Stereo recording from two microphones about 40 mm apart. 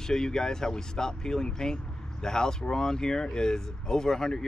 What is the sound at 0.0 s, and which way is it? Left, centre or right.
Speech, centre.